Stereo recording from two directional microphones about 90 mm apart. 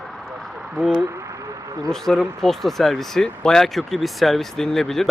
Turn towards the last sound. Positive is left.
turn(degrees=5)  # may be behind; listen again after turning